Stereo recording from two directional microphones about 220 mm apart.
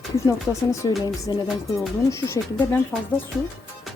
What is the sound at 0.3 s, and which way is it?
Speech, 15° left (ahead or behind).